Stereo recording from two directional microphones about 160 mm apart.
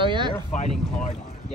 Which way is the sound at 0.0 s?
30° right (ahead or behind).